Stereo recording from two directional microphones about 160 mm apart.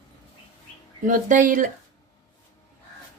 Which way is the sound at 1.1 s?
55° right (ahead or behind).